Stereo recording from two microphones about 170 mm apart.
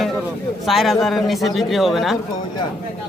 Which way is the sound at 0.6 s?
Centre (ahead or behind).